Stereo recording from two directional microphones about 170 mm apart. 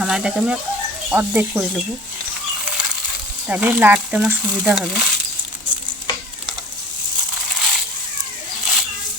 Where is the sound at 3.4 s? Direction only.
10° right (ahead or behind).